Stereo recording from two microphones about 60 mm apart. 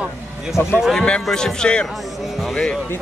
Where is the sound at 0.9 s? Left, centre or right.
Centre.